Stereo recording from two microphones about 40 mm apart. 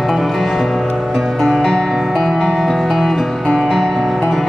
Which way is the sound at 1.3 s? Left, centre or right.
Centre.